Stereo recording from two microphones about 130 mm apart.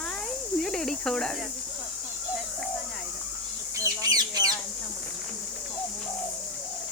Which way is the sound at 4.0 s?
30° right (ahead or behind).